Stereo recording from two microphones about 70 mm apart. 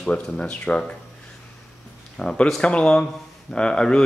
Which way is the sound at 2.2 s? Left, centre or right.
Centre.